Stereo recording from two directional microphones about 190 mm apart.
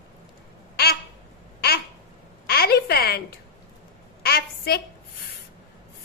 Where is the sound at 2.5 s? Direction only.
55° left (ahead or behind).